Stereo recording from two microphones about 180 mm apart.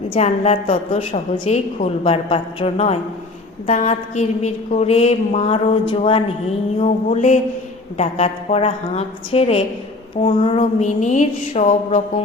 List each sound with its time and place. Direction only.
0.1 s a woman's voice: 40° left (ahead or behind)